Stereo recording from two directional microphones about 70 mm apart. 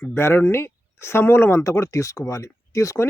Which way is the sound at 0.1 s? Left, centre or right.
Left.